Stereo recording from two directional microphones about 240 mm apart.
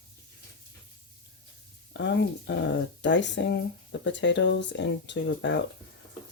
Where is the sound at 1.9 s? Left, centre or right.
Left.